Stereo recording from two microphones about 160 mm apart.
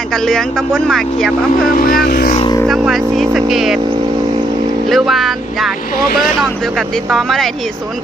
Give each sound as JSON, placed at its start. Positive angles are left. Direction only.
{"t": 0.1, "sound": "speech", "side_deg": 5}
{"t": 1.6, "sound": "speech", "side_deg": 60}
{"t": 2.0, "sound": "vehicle", "side_deg": 75}
{"t": 2.6, "sound": "speech", "side_deg": 0}
{"t": 4.9, "sound": "speech", "side_deg": 0}
{"t": 6.7, "sound": "speech", "side_deg": 0}